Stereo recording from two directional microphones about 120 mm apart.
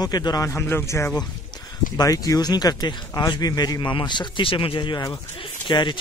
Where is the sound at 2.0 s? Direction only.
30° left (ahead or behind).